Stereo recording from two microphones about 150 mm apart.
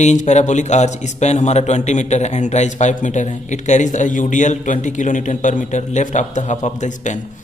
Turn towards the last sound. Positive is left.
turn(degrees=55)  # may be behind; listen again after turning